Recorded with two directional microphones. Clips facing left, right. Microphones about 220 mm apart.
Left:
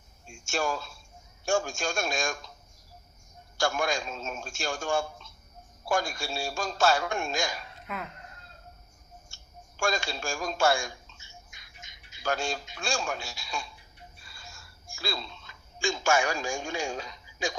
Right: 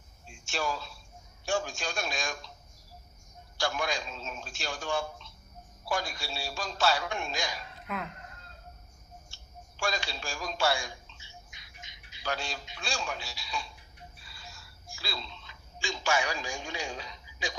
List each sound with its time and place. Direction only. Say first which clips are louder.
0.3 s speech: left 3 dB; 45° left (ahead or behind)
3.6 s speech: left 4 dB; 45° left (ahead or behind)
7.9 s speech: right 1 dB; centre (ahead or behind)
9.3 s a sound: even; 45° left (ahead or behind)